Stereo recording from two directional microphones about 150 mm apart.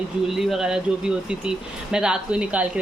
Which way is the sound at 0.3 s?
Centre (ahead or behind).